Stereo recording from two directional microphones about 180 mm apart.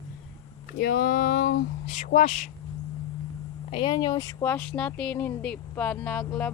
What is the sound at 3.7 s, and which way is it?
Speech, 25° left (ahead or behind).